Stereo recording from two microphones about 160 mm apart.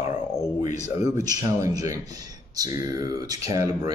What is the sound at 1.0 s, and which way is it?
Speech, 25° right (ahead or behind).